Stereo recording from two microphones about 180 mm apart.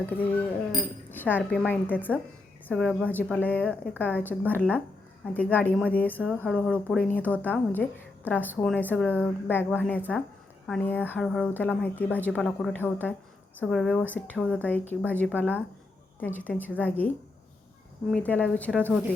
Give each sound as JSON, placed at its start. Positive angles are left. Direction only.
{"t": 0.0, "sound": "speech", "side_deg": 10}
{"t": 18.1, "sound": "speech", "side_deg": 10}